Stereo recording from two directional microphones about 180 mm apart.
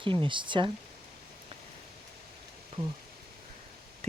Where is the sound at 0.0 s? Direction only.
30° right (ahead or behind).